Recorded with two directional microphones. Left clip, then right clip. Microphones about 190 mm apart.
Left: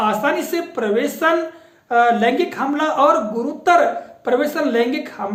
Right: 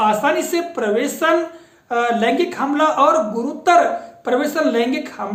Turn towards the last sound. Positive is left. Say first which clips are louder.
# right 1 dB
turn(degrees=0)  # may be behind; listen again after turning